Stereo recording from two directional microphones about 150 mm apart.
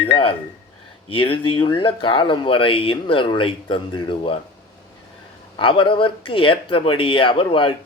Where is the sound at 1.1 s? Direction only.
35° left (ahead or behind).